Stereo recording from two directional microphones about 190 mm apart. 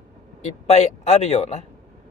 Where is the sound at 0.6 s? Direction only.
35° left (ahead or behind).